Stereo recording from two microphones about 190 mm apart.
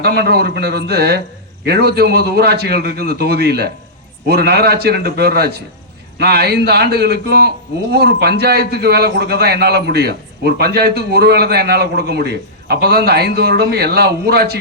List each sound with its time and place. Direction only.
0.0 s a man's voice: 60° right (ahead or behind)